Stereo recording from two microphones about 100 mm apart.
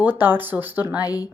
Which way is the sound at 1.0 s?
40° left (ahead or behind).